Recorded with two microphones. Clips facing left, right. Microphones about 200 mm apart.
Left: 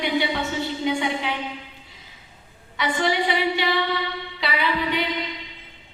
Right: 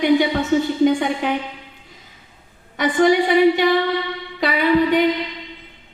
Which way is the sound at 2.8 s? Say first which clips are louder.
Right 8 dB; 50° right (ahead or behind).